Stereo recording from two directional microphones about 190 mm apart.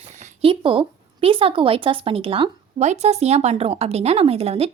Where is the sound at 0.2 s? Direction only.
30° right (ahead or behind).